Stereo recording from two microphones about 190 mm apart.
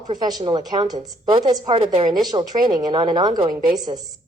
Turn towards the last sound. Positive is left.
turn(degrees=-20)  # may be behind; listen again after turning